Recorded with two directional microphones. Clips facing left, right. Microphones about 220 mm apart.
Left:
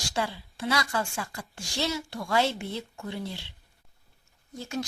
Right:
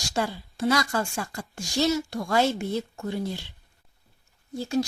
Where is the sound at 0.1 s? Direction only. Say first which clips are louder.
Right 3 dB; 45° right (ahead or behind).